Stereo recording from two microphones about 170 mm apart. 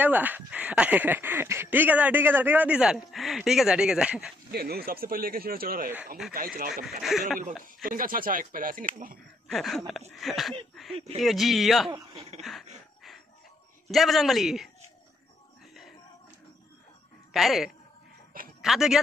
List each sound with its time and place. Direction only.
0.0 s speech: 10° right (ahead or behind)
4.5 s speech: 65° right (ahead or behind)
6.9 s a man's voice: centre (ahead or behind)
7.8 s speech: 55° right (ahead or behind)
9.5 s a man's voice: centre (ahead or behind)
13.8 s a man's voice: centre (ahead or behind)
17.3 s a woman's voice: centre (ahead or behind)